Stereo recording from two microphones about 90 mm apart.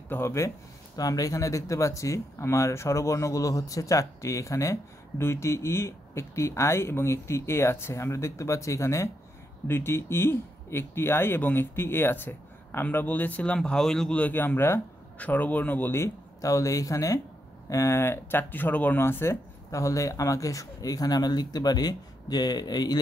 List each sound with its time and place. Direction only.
0.1 s speech: 30° left (ahead or behind)
0.9 s speech: 45° left (ahead or behind)